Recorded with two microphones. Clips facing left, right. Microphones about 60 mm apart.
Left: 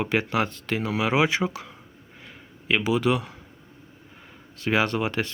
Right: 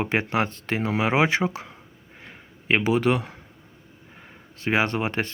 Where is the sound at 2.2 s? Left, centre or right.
Right.